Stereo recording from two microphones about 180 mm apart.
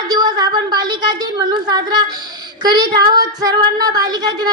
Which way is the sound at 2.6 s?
25° right (ahead or behind).